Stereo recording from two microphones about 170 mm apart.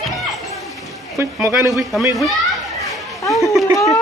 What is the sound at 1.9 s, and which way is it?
Speech, centre (ahead or behind).